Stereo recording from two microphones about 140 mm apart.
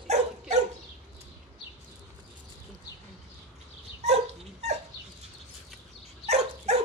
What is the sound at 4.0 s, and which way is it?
Dog, 55° right (ahead or behind).